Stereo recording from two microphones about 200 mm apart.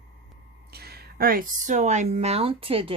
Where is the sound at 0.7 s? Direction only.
50° right (ahead or behind).